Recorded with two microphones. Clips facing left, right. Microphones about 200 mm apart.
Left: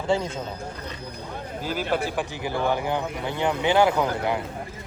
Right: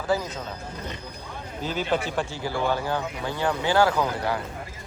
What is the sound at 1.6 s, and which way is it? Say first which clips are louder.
A man's voice: even; 10° left (ahead or behind).